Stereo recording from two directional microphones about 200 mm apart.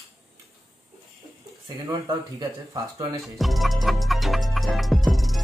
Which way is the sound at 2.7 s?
15° right (ahead or behind).